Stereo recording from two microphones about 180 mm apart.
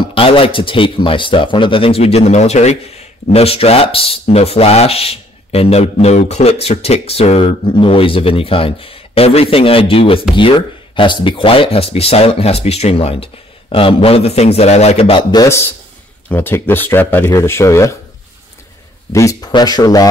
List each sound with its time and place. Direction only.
0.1 s a man's voice: 30° left (ahead or behind)
15.4 s speech: 15° left (ahead or behind)
19.1 s a man's voice: 20° left (ahead or behind)